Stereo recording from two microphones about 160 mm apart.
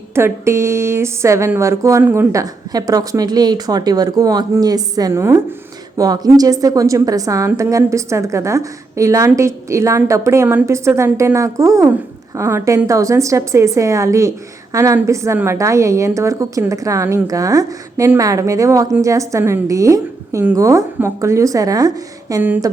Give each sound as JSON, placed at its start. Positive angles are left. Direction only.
{"t": 0.1, "sound": "a woman's voice", "side_deg": -15}
{"t": 22.4, "sound": "a woman's voice", "side_deg": -10}